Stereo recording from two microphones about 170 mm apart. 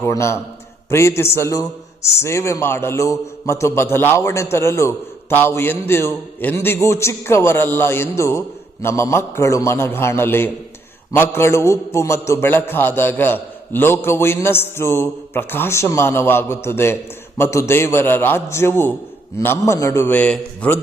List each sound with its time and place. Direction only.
0.0 s a man's voice: 15° left (ahead or behind)